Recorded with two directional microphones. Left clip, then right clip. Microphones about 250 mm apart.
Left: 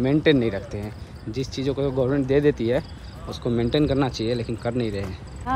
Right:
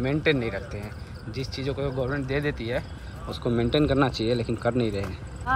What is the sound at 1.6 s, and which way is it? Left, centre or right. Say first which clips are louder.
Speech: left 6 dB; centre.